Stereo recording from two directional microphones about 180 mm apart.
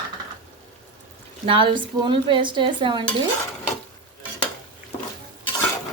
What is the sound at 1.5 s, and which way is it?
Speech, 25° right (ahead or behind).